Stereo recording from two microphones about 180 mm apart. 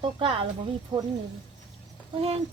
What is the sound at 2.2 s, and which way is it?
Speech, 35° right (ahead or behind).